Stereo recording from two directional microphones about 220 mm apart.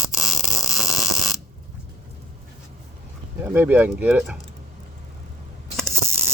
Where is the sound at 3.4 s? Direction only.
10° right (ahead or behind).